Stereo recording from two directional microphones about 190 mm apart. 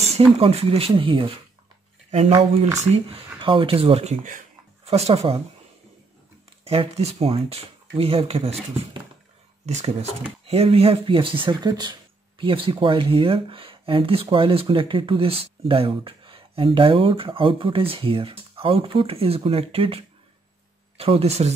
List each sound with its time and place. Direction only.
0.0 s speech: 30° right (ahead or behind)
6.6 s speech: 30° right (ahead or behind)
9.6 s speech: 35° right (ahead or behind)
21.0 s speech: 30° right (ahead or behind)